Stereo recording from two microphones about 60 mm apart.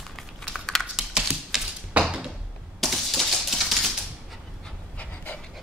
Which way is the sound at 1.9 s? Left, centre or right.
Centre.